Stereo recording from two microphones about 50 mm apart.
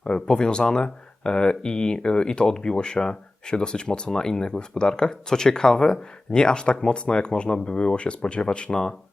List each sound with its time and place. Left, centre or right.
0.0 s speech: centre